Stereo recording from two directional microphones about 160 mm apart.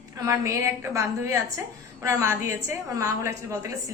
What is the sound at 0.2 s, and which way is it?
A woman's voice, 20° right (ahead or behind).